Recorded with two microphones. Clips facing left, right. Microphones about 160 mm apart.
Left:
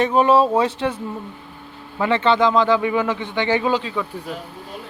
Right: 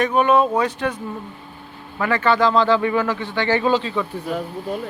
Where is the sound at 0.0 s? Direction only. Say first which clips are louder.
Left 1 dB; 30° left (ahead or behind).